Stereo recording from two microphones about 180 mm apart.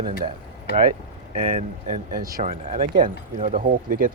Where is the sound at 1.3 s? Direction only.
35° right (ahead or behind).